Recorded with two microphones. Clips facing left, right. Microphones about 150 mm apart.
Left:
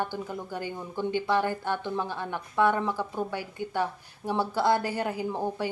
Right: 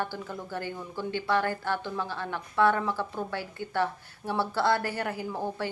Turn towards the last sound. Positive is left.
turn(degrees=15)  # may be behind; listen again after turning